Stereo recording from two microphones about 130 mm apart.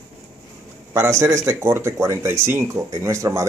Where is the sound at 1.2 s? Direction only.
20° right (ahead or behind).